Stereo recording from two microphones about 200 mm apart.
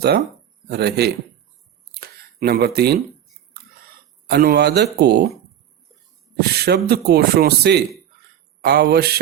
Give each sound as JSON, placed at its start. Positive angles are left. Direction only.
{"t": 0.7, "sound": "speech", "side_deg": -55}
{"t": 1.9, "sound": "a sound", "side_deg": -50}
{"t": 4.3, "sound": "speech", "side_deg": -50}
{"t": 6.4, "sound": "speech", "side_deg": -55}